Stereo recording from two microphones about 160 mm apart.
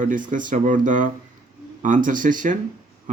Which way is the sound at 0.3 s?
55° right (ahead or behind).